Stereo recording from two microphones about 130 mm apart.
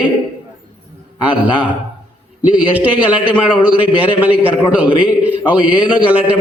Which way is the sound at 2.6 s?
10° right (ahead or behind).